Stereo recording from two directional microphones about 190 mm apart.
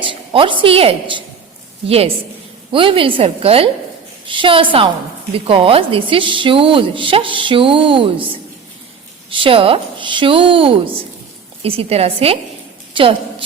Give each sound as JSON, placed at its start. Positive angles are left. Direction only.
{"t": 0.0, "sound": "a woman's voice", "side_deg": -25}
{"t": 2.7, "sound": "a woman's voice", "side_deg": -30}
{"t": 9.3, "sound": "a woman's voice", "side_deg": -25}
{"t": 12.9, "sound": "a sound", "side_deg": -25}